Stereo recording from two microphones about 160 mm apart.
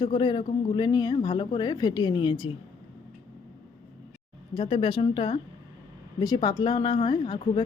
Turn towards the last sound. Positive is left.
turn(degrees=30)  # may be behind; listen again after turning